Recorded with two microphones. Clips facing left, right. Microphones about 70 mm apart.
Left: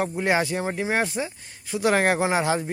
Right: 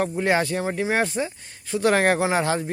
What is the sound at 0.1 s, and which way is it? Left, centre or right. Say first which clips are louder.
Speech: right 1 dB; centre.